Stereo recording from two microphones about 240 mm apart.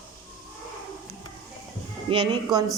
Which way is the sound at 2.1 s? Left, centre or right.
Centre.